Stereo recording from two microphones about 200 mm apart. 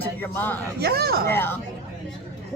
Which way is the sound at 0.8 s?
50° right (ahead or behind).